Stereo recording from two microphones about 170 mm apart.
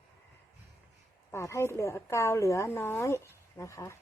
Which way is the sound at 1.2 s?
15° left (ahead or behind).